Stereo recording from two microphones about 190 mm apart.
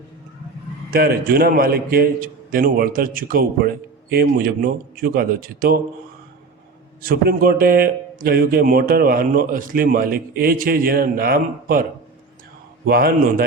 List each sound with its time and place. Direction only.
0.9 s a man's voice: 50° right (ahead or behind)
7.0 s a man's voice: 50° right (ahead or behind)